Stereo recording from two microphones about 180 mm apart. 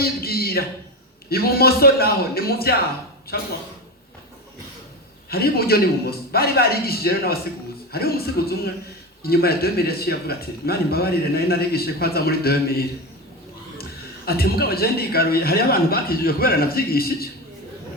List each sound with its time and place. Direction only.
0.0 s a sound: 60° left (ahead or behind)
1.3 s speech: 60° left (ahead or behind)
5.3 s speech: 60° left (ahead or behind)
14.3 s speech: 60° left (ahead or behind)